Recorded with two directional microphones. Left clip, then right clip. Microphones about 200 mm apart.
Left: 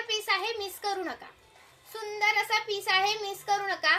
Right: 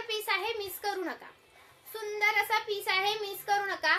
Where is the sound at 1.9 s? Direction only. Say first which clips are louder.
Left 1 dB; 15° right (ahead or behind).